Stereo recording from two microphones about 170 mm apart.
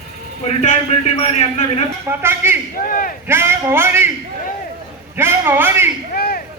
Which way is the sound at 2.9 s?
55° left (ahead or behind).